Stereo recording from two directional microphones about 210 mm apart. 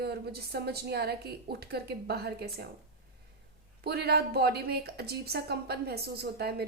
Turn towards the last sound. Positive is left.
turn(degrees=-50)  # may be behind; listen again after turning